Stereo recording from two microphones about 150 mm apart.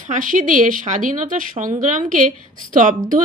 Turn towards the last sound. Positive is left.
turn(degrees=-60)  # may be behind; listen again after turning